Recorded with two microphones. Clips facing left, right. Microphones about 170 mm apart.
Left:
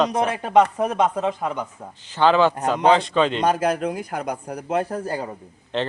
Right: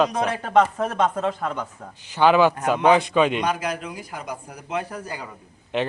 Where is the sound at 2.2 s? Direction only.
10° right (ahead or behind).